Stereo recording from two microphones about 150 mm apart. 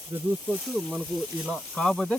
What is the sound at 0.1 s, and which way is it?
Speech, 20° right (ahead or behind).